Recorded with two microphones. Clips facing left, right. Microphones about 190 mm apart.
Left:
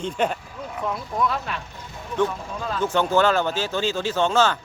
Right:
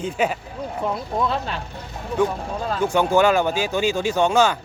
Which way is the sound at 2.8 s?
10° right (ahead or behind).